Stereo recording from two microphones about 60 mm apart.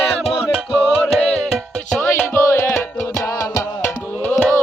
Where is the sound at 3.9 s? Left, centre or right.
Left.